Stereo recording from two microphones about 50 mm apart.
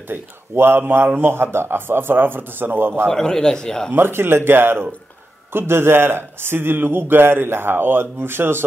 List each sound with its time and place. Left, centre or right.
0.1 s a man's voice: right
3.1 s a man's voice: centre
3.9 s a man's voice: right